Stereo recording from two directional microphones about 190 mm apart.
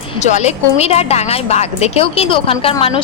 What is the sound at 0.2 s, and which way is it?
A woman's voice, 35° left (ahead or behind).